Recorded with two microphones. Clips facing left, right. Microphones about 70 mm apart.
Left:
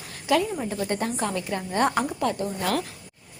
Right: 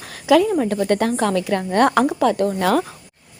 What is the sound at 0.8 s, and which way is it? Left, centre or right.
Speech, right.